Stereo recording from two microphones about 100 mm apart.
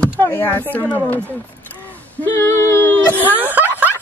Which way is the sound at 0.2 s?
20° left (ahead or behind).